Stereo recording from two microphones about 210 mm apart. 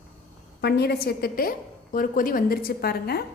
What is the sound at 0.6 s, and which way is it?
A woman's voice, 50° left (ahead or behind).